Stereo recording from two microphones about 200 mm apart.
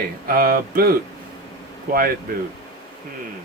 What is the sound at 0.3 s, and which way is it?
Speech, 45° right (ahead or behind).